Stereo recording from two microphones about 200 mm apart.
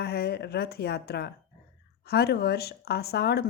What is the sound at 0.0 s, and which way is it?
A woman's voice, 55° left (ahead or behind).